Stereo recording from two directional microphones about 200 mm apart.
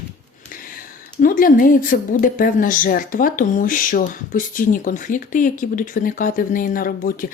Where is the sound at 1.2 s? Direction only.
45° left (ahead or behind).